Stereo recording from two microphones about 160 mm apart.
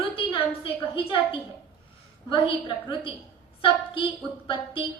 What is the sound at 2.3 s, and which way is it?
Speech, 30° left (ahead or behind).